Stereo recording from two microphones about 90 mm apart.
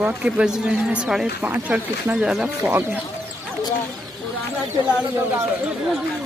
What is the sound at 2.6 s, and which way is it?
Speech, 20° right (ahead or behind).